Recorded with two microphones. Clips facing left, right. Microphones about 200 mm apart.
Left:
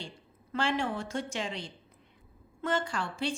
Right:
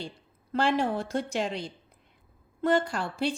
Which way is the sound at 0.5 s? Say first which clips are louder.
Right 5 dB; 35° right (ahead or behind).